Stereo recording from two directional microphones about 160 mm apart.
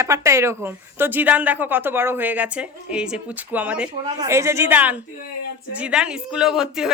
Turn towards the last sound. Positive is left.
turn(degrees=-5)  # may be behind; listen again after turning